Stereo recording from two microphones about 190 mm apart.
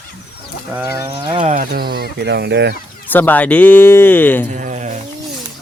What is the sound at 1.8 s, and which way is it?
Speech, 55° right (ahead or behind).